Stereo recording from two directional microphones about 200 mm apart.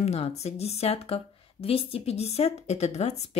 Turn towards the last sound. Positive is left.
turn(degrees=35)  # may be behind; listen again after turning